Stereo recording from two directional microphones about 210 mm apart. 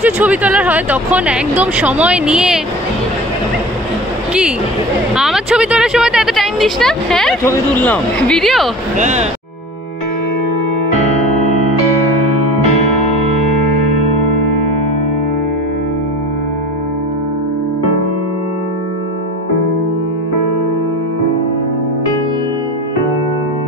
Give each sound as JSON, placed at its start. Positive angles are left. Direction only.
{"t": 0.0, "sound": "speech", "side_deg": -5}
{"t": 4.3, "sound": "speech", "side_deg": -5}
{"t": 8.9, "sound": "speech", "side_deg": -35}